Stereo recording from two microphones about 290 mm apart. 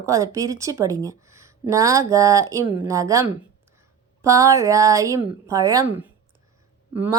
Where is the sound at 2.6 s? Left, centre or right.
Left.